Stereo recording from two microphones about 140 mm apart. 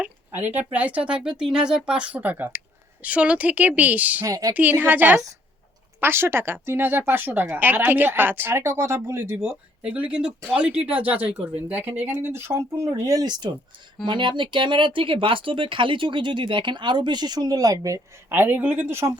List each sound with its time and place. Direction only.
0.0 s speech: 15° right (ahead or behind)
4.3 s speech: 25° right (ahead or behind)
4.5 s speech: 10° right (ahead or behind)
9.4 s speech: 10° right (ahead or behind)